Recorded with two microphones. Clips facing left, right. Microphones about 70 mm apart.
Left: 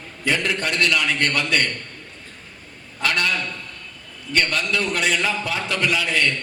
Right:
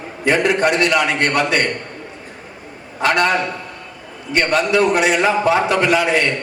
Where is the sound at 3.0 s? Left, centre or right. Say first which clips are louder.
Right 7 dB; right.